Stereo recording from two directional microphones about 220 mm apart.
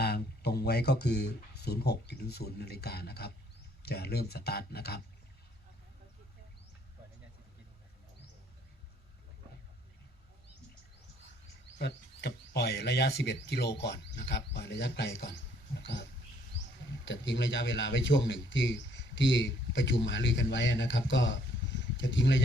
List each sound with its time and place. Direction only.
0.0 s speech: 45° left (ahead or behind)
11.8 s speech: 50° left (ahead or behind)
17.1 s speech: 55° left (ahead or behind)